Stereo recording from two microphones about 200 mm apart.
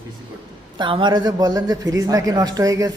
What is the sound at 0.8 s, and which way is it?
A man's voice, 25° right (ahead or behind).